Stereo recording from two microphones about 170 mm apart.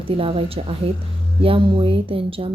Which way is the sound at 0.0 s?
35° right (ahead or behind).